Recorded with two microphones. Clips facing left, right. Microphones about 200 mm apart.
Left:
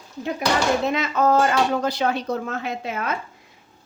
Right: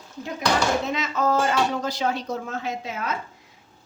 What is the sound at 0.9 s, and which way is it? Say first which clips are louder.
Speech: left 4 dB; 60° left (ahead or behind).